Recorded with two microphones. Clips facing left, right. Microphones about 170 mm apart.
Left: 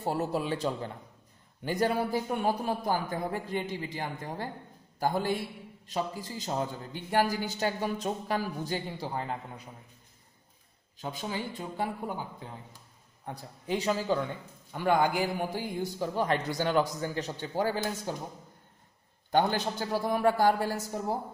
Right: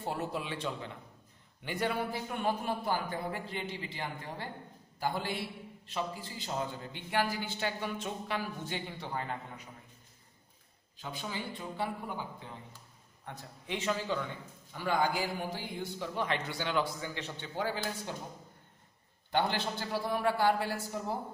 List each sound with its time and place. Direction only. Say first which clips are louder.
0.0 s a man's voice: left 6 dB; 40° left (ahead or behind)
11.0 s a man's voice: left 5 dB; 40° left (ahead or behind)
13.2 s a man's voice: left 5 dB; 35° left (ahead or behind)
14.7 s a man's voice: left 5 dB; 55° left (ahead or behind)
19.3 s a man's voice: left 5 dB; 40° left (ahead or behind)